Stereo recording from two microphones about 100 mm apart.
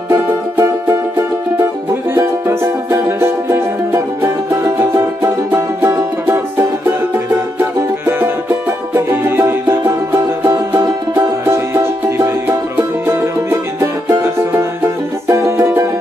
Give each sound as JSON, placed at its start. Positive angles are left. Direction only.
{"t": 0.1, "sound": "music", "side_deg": -25}
{"t": 7.5, "sound": "music", "side_deg": -20}